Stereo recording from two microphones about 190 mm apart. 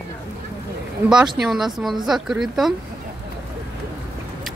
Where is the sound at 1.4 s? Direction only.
Centre (ahead or behind).